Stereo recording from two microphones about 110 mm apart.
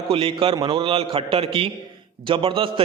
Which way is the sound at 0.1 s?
55° right (ahead or behind).